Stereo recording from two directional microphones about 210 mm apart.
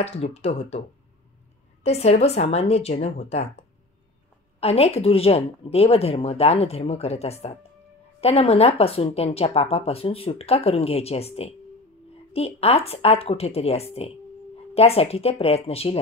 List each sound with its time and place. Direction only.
0.0 s a woman's voice: 30° left (ahead or behind)